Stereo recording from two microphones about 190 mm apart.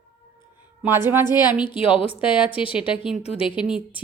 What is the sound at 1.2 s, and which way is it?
A woman's voice, 20° left (ahead or behind).